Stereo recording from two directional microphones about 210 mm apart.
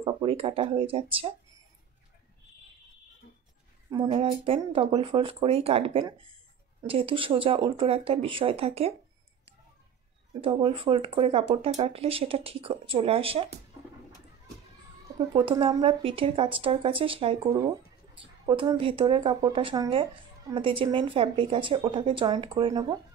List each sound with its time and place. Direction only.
0.0 s speech: 25° right (ahead or behind)
3.9 s speech: 25° right (ahead or behind)
10.4 s speech: 25° right (ahead or behind)
15.3 s speech: 25° right (ahead or behind)